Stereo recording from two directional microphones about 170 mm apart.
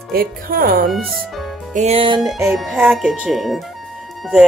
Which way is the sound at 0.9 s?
Centre (ahead or behind).